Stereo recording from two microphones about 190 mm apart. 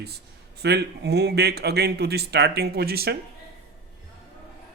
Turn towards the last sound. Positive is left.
turn(degrees=-55)  # may be behind; listen again after turning